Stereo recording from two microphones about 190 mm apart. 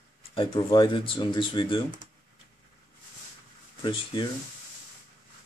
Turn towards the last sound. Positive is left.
turn(degrees=25)  # may be behind; listen again after turning